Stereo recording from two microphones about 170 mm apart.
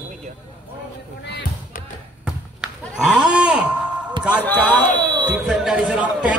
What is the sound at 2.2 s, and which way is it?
Basketball bounce, 5° right (ahead or behind).